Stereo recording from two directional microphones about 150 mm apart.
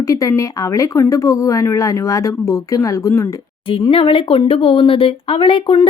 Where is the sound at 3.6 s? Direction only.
35° left (ahead or behind).